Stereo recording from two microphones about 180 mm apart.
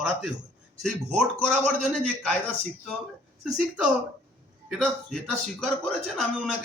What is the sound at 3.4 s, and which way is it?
A man's voice, 5° right (ahead or behind).